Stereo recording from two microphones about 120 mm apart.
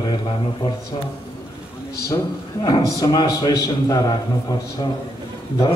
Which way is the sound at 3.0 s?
35° left (ahead or behind).